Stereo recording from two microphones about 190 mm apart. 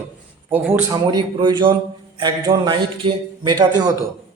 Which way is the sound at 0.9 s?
20° right (ahead or behind).